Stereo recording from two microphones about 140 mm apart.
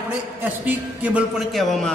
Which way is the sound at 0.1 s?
10° right (ahead or behind).